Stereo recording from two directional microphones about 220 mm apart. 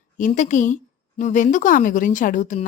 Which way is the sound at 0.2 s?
35° left (ahead or behind).